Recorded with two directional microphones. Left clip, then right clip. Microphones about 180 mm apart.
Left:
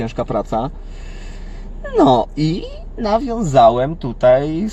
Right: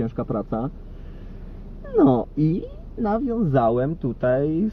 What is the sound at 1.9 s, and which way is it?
Speech, 25° right (ahead or behind).